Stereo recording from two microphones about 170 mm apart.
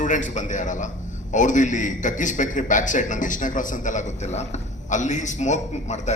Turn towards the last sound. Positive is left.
turn(degrees=45)  # may be behind; listen again after turning